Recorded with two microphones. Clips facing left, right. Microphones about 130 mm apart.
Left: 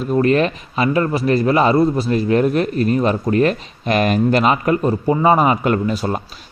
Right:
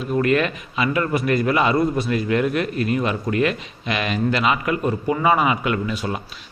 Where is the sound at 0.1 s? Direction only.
35° left (ahead or behind).